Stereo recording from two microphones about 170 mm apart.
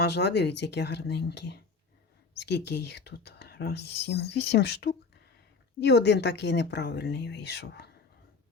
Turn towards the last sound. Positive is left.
turn(degrees=80)